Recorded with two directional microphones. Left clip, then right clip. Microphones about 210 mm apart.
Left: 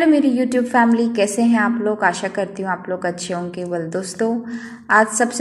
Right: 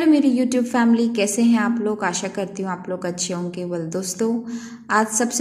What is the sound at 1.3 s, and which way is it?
A woman's voice, 30° right (ahead or behind).